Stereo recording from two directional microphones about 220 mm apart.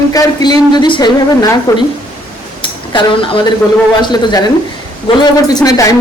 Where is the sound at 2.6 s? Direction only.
25° left (ahead or behind).